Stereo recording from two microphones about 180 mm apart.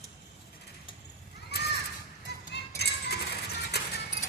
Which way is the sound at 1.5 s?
65° left (ahead or behind).